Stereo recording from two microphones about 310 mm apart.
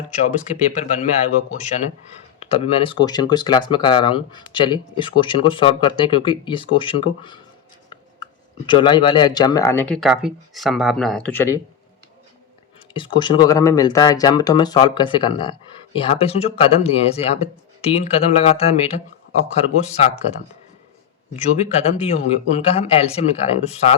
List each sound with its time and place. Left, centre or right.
0.8 s speech: left
8.6 s speech: centre
12.9 s speech: centre
21.3 s speech: left